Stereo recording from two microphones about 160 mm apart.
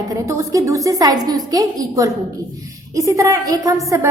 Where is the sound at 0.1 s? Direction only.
20° right (ahead or behind).